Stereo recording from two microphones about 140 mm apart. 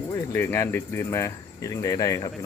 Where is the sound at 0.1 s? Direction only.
20° left (ahead or behind).